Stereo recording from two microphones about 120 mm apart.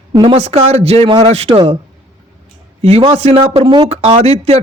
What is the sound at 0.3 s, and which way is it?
Speech, 60° right (ahead or behind).